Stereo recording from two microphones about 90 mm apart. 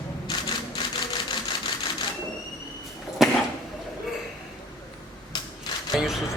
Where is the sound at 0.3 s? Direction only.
60° left (ahead or behind).